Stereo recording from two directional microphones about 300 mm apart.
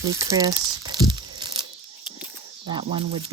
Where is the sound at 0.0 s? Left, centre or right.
Centre.